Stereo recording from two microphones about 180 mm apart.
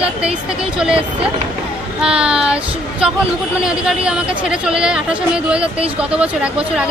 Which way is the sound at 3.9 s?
5° right (ahead or behind).